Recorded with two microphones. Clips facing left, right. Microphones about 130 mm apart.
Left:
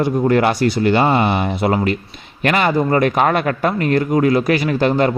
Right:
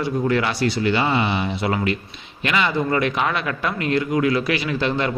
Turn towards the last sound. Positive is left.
turn(degrees=45)  # may be behind; listen again after turning